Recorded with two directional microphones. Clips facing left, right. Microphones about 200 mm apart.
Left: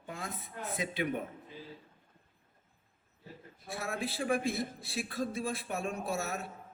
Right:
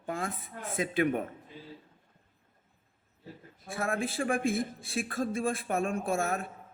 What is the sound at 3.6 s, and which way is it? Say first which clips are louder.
Speech: right 5 dB; 50° right (ahead or behind).